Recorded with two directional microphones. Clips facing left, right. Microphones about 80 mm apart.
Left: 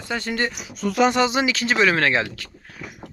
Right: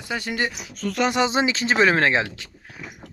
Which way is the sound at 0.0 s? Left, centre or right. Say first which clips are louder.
Left 1 dB; centre.